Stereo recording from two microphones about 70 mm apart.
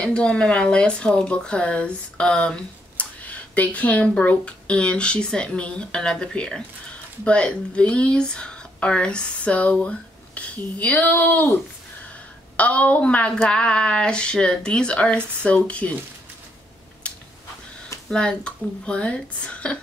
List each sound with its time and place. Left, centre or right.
0.0 s speech: centre
12.5 s a woman's voice: centre
17.0 s a sound: centre
18.1 s speech: centre